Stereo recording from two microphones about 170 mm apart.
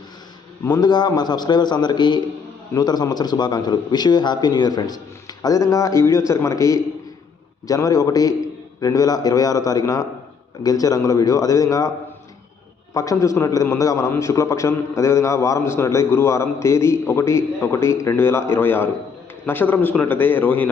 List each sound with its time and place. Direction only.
0.6 s a man's voice: 25° left (ahead or behind)
12.9 s a man's voice: 20° left (ahead or behind)